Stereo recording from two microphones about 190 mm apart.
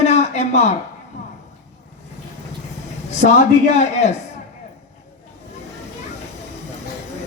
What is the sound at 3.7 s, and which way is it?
Speech, 35° left (ahead or behind).